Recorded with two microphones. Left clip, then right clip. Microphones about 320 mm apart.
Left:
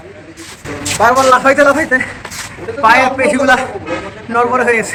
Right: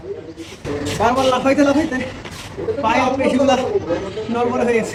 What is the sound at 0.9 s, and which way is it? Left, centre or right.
A man's voice, left.